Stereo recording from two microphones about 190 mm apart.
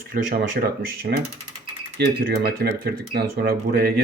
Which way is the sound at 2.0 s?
60° right (ahead or behind).